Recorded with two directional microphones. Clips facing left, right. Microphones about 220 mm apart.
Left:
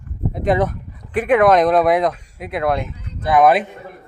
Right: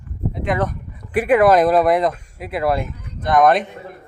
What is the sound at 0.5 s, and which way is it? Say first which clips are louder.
Speech: left 4 dB; 30° left (ahead or behind).